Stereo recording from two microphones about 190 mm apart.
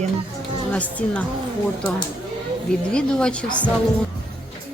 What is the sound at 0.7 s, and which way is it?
Speech, 5° left (ahead or behind).